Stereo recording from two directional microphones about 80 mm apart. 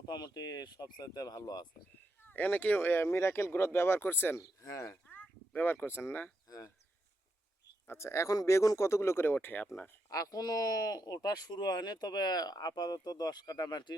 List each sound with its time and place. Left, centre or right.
0.0 s speech: left
2.2 s speech: left
4.4 s speech: left
5.0 s speech: centre
7.9 s speech: left
10.1 s speech: left